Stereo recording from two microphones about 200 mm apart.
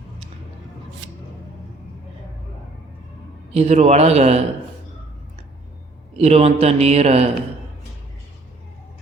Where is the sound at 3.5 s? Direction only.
30° right (ahead or behind).